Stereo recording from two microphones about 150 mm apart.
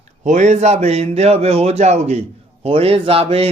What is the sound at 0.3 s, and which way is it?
Speech, 55° right (ahead or behind).